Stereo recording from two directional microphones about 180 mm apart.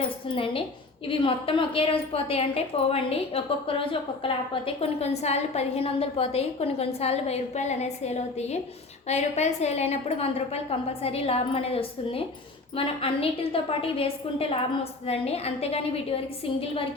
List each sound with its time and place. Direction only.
0.0 s a woman's voice: 30° left (ahead or behind)